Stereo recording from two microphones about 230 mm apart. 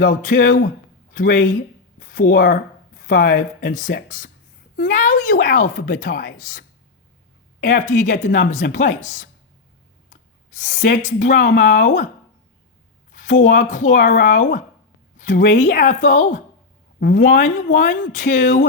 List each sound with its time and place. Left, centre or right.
0.0 s a woman's voice: left
13.1 s a woman's voice: left